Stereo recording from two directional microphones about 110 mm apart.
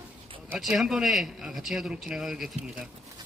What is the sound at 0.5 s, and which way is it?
A man's voice, centre (ahead or behind).